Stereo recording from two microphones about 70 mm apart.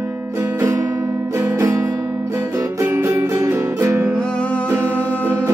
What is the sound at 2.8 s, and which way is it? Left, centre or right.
Music, right.